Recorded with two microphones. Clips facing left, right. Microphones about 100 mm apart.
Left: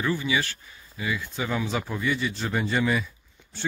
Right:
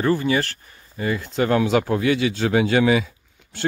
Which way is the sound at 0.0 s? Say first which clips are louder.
Right 6 dB; 50° right (ahead or behind).